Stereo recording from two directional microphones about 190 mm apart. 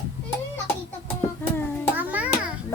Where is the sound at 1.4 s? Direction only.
10° left (ahead or behind).